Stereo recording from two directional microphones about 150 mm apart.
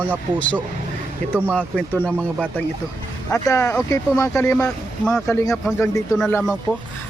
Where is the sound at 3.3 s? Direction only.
20° left (ahead or behind).